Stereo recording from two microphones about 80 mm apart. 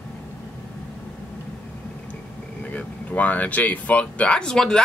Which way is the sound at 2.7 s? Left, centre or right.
Centre.